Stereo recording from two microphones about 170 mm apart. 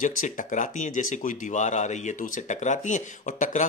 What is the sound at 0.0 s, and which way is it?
Speech, 50° left (ahead or behind).